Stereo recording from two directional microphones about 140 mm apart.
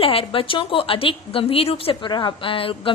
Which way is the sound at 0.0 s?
40° left (ahead or behind).